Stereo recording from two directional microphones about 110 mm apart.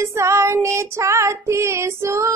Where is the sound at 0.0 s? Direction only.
25° right (ahead or behind).